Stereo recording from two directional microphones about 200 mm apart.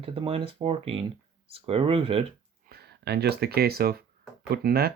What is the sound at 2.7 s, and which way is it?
Speech, 50° right (ahead or behind).